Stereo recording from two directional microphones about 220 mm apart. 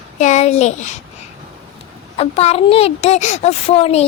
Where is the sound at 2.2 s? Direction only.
30° left (ahead or behind).